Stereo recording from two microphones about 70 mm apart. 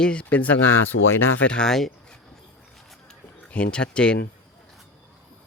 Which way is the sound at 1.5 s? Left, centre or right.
Centre.